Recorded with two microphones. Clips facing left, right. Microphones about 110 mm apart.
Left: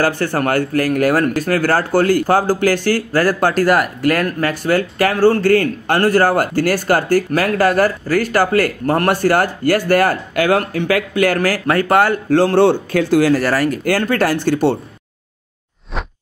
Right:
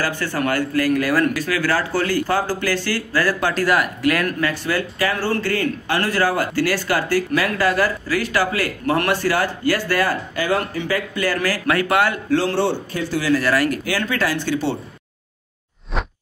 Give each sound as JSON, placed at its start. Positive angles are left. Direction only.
{"t": 0.0, "sound": "speech", "side_deg": 50}
{"t": 13.2, "sound": "speech", "side_deg": 40}
{"t": 13.8, "sound": "speech", "side_deg": 50}